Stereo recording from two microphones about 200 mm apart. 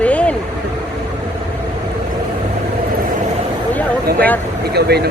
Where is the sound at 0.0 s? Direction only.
5° left (ahead or behind).